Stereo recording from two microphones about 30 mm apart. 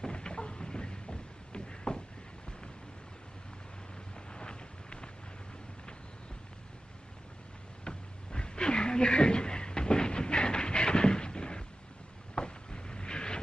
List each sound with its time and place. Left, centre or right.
0.0 s vehicle: left
4.3 s vehicle: left
7.8 s a sound: left
12.4 s vehicle: left